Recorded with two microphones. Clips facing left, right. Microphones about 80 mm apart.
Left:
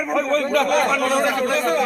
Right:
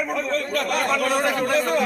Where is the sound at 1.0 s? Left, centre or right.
Centre.